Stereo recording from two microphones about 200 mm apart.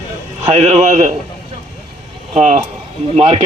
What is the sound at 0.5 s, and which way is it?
Speech, 35° right (ahead or behind).